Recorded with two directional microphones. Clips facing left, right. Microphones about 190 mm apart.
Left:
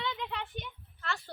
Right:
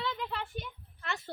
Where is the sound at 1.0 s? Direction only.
20° right (ahead or behind).